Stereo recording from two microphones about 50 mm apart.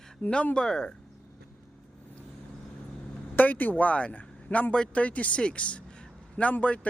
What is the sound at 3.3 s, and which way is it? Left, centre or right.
Speech, left.